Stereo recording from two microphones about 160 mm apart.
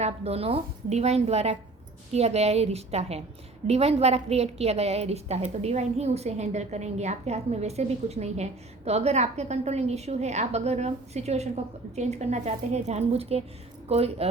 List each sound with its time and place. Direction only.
0.0 s a woman's voice: 40° right (ahead or behind)